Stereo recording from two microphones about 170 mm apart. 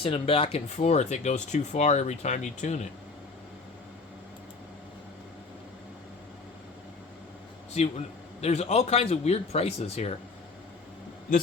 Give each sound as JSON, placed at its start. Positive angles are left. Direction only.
{"t": 0.0, "sound": "speech", "side_deg": 35}
{"t": 7.8, "sound": "a man's voice", "side_deg": 40}